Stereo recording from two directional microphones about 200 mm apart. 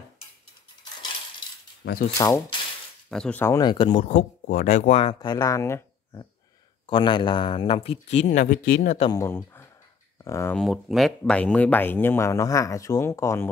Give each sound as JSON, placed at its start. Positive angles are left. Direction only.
{"t": 1.8, "sound": "speech", "side_deg": 60}
{"t": 2.1, "sound": "speech", "side_deg": 15}
{"t": 3.1, "sound": "speech", "side_deg": 5}
{"t": 4.5, "sound": "speech", "side_deg": 40}
{"t": 9.1, "sound": "speech", "side_deg": 15}
{"t": 10.6, "sound": "speech", "side_deg": 0}